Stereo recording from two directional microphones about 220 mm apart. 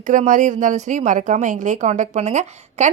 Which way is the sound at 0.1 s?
35° right (ahead or behind).